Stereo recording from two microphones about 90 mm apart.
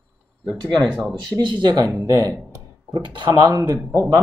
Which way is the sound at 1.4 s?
55° right (ahead or behind).